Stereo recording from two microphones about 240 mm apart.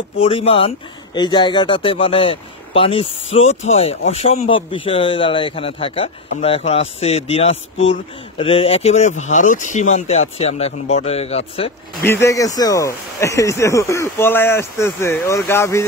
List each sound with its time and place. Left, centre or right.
0.2 s speech: left
12.0 s speech: centre